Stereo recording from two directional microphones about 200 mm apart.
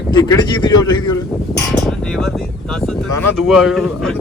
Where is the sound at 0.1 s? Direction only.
20° left (ahead or behind).